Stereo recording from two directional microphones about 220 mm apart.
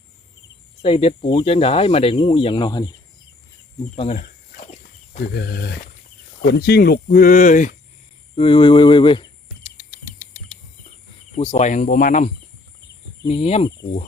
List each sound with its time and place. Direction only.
0.8 s speech: 25° left (ahead or behind)
3.9 s speech: 30° left (ahead or behind)
8.4 s speech: 25° left (ahead or behind)
9.7 s bird: 35° left (ahead or behind)
11.3 s speech: 25° left (ahead or behind)
13.2 s speech: 25° left (ahead or behind)